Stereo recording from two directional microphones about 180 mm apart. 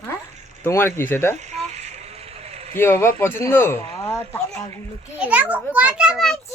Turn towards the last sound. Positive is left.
turn(degrees=0)  # may be behind; listen again after turning